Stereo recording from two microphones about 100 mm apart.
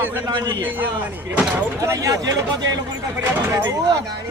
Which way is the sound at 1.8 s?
35° right (ahead or behind).